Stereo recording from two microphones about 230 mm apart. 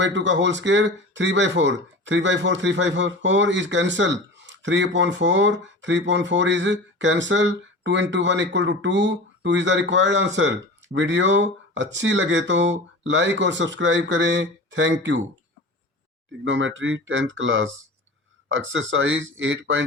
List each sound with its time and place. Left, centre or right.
0.0 s speech: right
16.4 s speech: right